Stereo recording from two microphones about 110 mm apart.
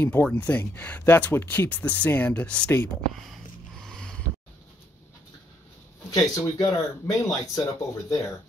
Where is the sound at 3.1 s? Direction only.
Centre (ahead or behind).